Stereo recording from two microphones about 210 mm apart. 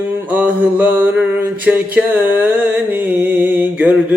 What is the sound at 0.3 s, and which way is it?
Music, 5° right (ahead or behind).